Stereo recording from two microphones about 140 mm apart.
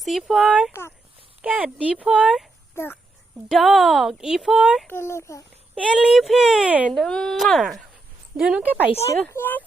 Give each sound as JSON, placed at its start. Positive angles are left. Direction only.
{"t": 0.0, "sound": "speech", "side_deg": 0}
{"t": 0.7, "sound": "a child's voice", "side_deg": 20}
{"t": 1.4, "sound": "speech", "side_deg": -10}
{"t": 2.7, "sound": "a child's voice", "side_deg": 15}
{"t": 3.5, "sound": "speech", "side_deg": 0}
{"t": 4.9, "sound": "speech", "side_deg": 20}
{"t": 5.7, "sound": "speech", "side_deg": -5}
{"t": 6.9, "sound": "speech", "side_deg": 5}
{"t": 9.2, "sound": "a child's voice", "side_deg": 15}